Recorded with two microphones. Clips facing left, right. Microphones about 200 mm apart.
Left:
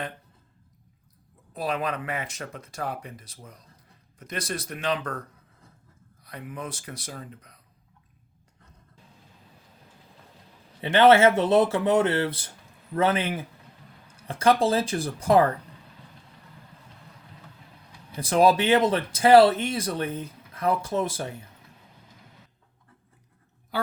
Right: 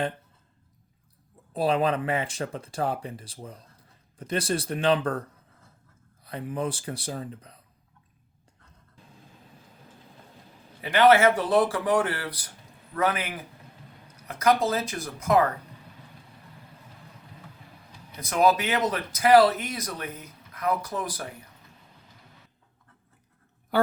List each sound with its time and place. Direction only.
1.5 s speech: 30° right (ahead or behind)
6.2 s speech: 30° right (ahead or behind)
10.8 s speech: 25° left (ahead or behind)
18.2 s speech: 30° left (ahead or behind)